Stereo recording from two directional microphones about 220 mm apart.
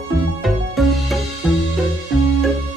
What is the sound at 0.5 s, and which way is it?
Music, centre (ahead or behind).